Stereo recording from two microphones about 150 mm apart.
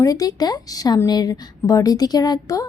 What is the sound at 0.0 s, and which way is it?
A woman's voice, 25° left (ahead or behind).